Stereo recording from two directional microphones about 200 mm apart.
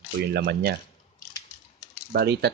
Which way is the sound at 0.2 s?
55° right (ahead or behind).